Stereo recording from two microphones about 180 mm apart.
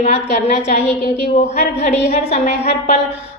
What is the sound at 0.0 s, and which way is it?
A woman's voice, 40° left (ahead or behind).